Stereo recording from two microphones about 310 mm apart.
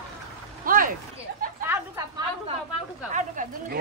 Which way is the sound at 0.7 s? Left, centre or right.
Right.